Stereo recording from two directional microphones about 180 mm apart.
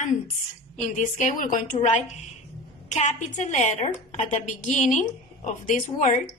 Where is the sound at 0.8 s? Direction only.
45° left (ahead or behind).